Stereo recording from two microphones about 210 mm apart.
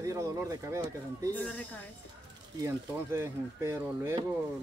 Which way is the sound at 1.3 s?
10° left (ahead or behind).